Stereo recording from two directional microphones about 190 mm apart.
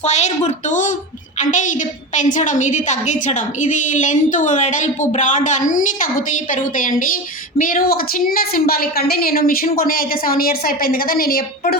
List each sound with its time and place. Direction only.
0.0 s a woman's voice: 35° left (ahead or behind); by 11.8 s 50° left (ahead or behind)